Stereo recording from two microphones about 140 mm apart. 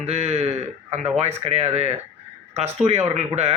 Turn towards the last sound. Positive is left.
turn(degrees=-50)  # may be behind; listen again after turning